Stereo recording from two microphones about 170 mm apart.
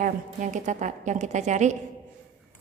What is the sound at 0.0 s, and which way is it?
A woman's voice, 45° right (ahead or behind).